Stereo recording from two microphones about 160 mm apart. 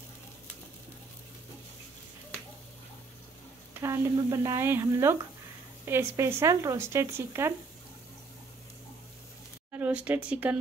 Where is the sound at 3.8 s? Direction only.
15° right (ahead or behind).